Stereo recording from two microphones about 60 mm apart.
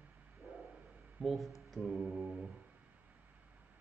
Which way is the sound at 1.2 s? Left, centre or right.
Centre.